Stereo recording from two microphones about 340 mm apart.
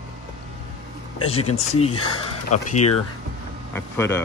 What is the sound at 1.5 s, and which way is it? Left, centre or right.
Speech, centre.